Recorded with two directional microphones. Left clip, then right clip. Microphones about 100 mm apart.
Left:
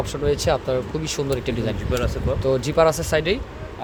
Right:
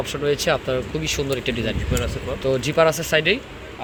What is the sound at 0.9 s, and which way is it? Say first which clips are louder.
Speech: right 1 dB; 20° left (ahead or behind).